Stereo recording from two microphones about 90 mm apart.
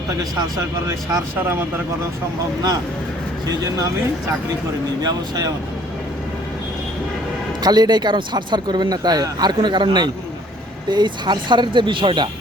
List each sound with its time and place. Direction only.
0.9 s speech: 35° right (ahead or behind)
7.6 s speech: 50° right (ahead or behind)